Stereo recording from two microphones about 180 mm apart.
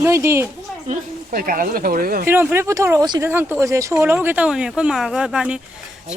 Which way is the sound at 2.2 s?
10° right (ahead or behind).